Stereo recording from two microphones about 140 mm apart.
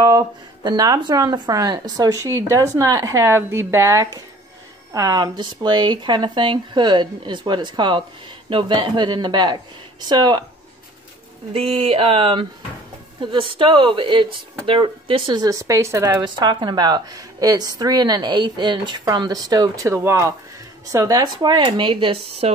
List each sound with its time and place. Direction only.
0.7 s speech: 30° right (ahead or behind)
11.5 s a sound: 45° right (ahead or behind)
13.2 s speech: 35° right (ahead or behind)